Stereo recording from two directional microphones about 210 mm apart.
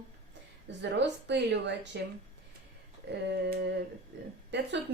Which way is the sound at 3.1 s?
55° right (ahead or behind).